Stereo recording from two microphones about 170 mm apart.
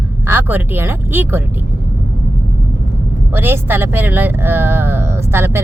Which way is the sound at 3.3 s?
15° right (ahead or behind).